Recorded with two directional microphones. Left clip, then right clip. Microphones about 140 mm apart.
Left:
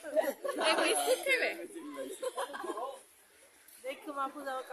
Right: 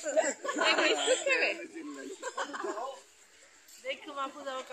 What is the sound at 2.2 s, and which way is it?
Speech, 15° left (ahead or behind).